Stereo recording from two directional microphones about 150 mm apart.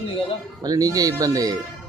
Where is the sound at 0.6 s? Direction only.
25° right (ahead or behind).